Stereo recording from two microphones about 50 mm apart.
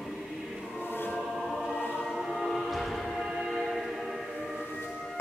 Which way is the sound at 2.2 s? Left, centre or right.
Centre.